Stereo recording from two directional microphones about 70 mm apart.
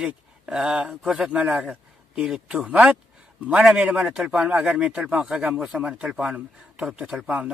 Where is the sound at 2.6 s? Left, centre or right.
Right.